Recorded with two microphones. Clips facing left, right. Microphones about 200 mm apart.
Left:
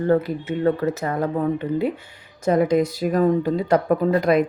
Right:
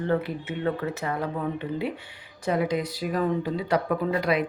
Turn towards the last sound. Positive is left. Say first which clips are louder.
# left 7 dB
turn(degrees=45)  # may be behind; listen again after turning